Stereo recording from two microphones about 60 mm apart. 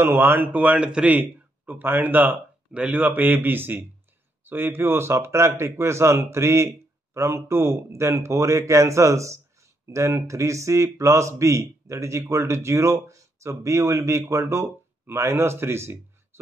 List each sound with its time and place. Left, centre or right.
0.0 s speech: right
0.7 s speech: centre
1.7 s speech: right